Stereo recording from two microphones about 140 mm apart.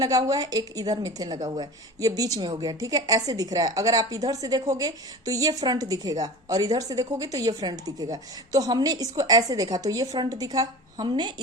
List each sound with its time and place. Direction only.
0.0 s a woman's voice: 25° right (ahead or behind)